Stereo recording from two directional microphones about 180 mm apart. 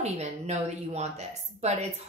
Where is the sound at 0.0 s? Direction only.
40° right (ahead or behind).